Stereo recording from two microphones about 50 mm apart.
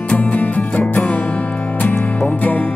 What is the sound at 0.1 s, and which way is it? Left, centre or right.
Music, left.